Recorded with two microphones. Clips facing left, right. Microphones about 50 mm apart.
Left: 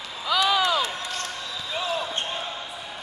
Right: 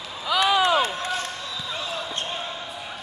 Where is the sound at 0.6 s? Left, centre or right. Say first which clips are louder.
Right 3 dB; right.